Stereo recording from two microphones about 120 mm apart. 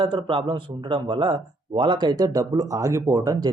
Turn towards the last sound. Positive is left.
turn(degrees=-30)  # may be behind; listen again after turning